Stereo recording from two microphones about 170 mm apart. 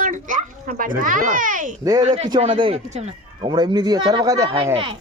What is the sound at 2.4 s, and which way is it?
Speech, 30° right (ahead or behind).